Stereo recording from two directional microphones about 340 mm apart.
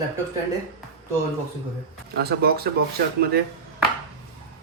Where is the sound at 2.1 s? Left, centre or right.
Right.